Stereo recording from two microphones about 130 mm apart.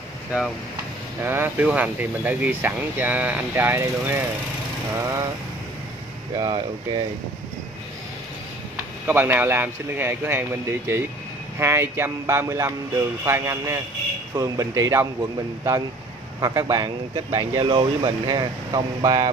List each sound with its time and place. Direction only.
1.2 s speech: 15° right (ahead or behind)
6.3 s speech: 30° right (ahead or behind)
9.0 s speech: 15° right (ahead or behind)
16.3 s speech: 25° right (ahead or behind)